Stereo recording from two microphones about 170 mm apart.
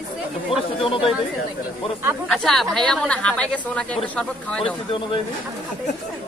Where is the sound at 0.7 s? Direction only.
30° left (ahead or behind).